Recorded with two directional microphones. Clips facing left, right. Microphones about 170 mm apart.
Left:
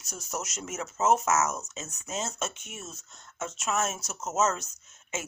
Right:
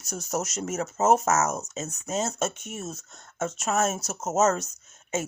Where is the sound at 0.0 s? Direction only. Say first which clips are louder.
Right 7 dB; 40° right (ahead or behind).